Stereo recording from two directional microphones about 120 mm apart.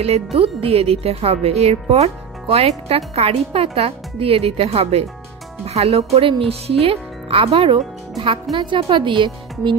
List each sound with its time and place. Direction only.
0.0 s speech: 55° right (ahead or behind)